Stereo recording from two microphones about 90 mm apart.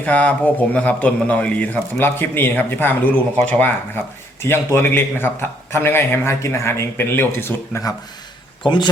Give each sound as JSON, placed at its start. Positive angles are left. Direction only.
{"t": 0.0, "sound": "a man's voice", "side_deg": 15}
{"t": 8.6, "sound": "speech", "side_deg": 65}